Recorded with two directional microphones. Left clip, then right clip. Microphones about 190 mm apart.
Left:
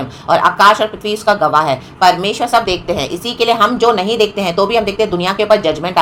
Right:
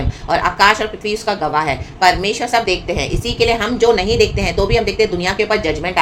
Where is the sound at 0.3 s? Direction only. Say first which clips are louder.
Left 4 dB; 20° left (ahead or behind).